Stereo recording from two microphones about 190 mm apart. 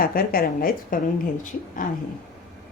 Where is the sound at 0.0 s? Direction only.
50° left (ahead or behind).